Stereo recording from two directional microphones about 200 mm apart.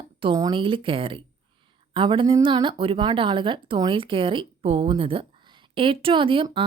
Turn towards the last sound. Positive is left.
turn(degrees=-25)  # may be behind; listen again after turning